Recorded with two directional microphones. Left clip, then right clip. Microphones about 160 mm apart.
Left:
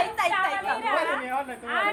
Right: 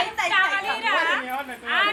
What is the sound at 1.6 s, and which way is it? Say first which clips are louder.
Speech: right 6 dB; 75° left (ahead or behind).